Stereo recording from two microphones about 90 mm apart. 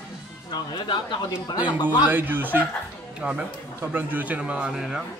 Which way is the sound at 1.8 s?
20° right (ahead or behind).